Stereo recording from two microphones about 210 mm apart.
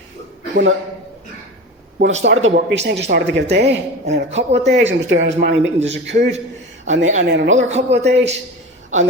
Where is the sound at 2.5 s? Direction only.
55° right (ahead or behind).